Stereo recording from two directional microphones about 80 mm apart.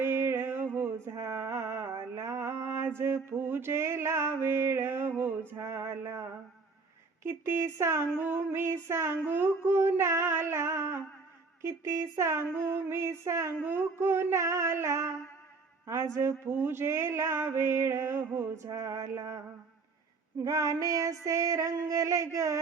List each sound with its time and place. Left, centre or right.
0.0 s music: right
1.1 s music: right
5.5 s speech: right
7.3 s speech: right
8.1 s music: right
9.6 s speech: right
18.6 s speech: right
20.4 s female singing: right